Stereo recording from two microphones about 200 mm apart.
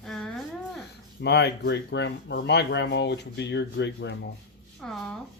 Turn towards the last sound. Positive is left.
turn(degrees=5)  # may be behind; listen again after turning